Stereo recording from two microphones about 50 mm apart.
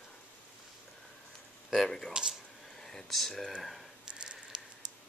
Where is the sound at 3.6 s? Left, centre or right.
Centre.